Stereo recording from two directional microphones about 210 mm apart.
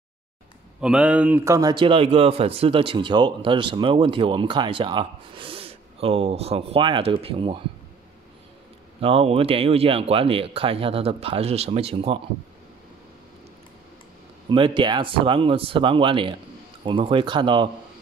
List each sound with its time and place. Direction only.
0.7 s speech: 5° right (ahead or behind); by 7.6 s 25° right (ahead or behind)
9.0 s speech: 25° right (ahead or behind)
14.5 s speech: 25° right (ahead or behind)